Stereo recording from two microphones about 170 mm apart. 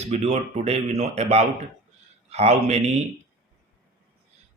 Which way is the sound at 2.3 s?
40° right (ahead or behind).